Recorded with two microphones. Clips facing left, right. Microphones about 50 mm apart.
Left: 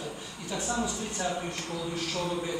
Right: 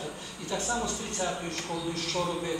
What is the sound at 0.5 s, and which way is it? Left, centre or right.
Speech, centre.